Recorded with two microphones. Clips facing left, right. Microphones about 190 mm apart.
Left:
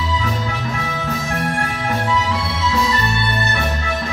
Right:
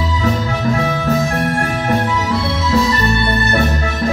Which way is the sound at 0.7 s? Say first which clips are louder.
Right 8 dB; 40° right (ahead or behind).